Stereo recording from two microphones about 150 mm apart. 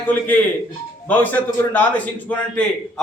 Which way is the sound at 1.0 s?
10° left (ahead or behind).